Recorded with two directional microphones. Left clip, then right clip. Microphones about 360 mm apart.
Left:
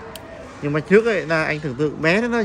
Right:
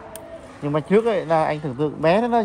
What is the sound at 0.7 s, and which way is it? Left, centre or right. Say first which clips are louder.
Speech: left 2 dB; centre.